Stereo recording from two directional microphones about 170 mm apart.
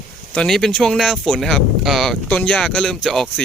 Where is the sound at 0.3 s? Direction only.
Centre (ahead or behind).